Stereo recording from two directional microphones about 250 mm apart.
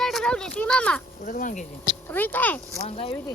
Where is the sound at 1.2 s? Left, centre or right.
Left.